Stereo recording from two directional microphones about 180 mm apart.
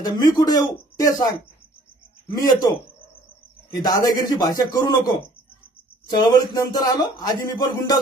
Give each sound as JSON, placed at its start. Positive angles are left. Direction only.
{"t": 0.0, "sound": "speech", "side_deg": 20}
{"t": 2.3, "sound": "speech", "side_deg": 20}
{"t": 3.8, "sound": "speech", "side_deg": 20}